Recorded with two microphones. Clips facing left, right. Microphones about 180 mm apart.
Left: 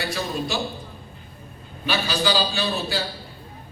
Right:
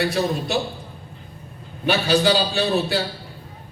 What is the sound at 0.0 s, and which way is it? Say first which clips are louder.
Speech: right 5 dB; 60° right (ahead or behind).